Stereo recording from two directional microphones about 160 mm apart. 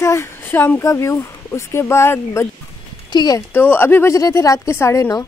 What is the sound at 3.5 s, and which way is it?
Speech, 10° left (ahead or behind).